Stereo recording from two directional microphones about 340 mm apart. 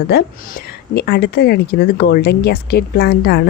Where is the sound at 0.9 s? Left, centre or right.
Left.